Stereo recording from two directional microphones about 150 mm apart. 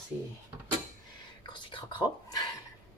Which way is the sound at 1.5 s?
30° left (ahead or behind).